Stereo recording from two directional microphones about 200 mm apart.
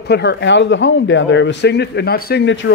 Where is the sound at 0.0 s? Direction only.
55° left (ahead or behind).